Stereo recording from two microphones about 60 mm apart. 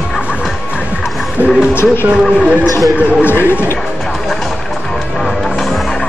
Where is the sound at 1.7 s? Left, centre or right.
Left.